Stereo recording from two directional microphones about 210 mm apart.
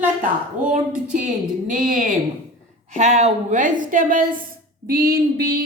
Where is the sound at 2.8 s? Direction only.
35° right (ahead or behind).